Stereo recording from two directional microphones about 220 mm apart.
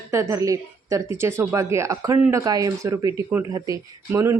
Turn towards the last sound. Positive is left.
turn(degrees=-10)  # may be behind; listen again after turning